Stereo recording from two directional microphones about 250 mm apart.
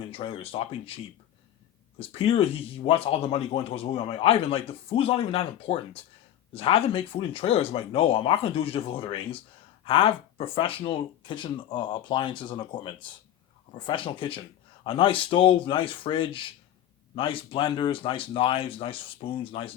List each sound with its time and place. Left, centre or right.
0.1 s speech: left